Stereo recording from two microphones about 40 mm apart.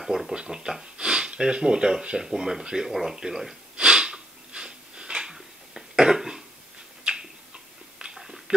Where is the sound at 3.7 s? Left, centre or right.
Right.